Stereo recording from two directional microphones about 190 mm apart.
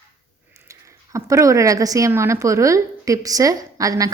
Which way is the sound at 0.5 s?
15° right (ahead or behind).